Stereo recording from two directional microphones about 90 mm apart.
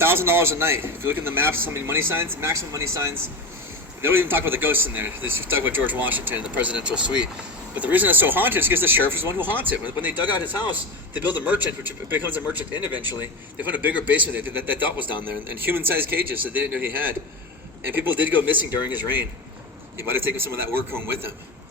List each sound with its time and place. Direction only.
0.0 s a man's voice: 25° right (ahead or behind)
12.7 s speech: 50° left (ahead or behind)
13.6 s a man's voice: 20° right (ahead or behind)